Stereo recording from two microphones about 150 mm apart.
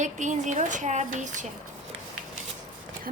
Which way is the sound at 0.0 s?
55° right (ahead or behind).